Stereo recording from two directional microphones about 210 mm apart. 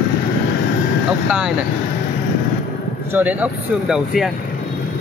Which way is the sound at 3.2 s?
5° right (ahead or behind).